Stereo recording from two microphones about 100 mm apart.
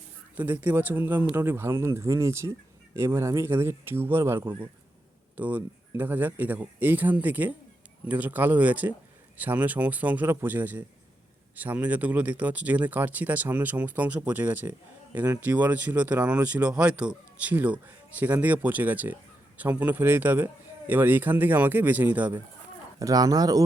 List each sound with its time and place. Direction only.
0.3 s speech: 20° right (ahead or behind)
23.0 s speech: 35° right (ahead or behind)